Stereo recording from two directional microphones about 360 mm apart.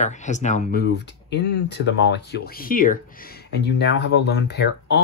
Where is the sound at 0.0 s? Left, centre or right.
Centre.